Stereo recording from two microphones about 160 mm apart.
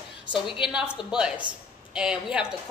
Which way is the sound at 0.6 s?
5° right (ahead or behind).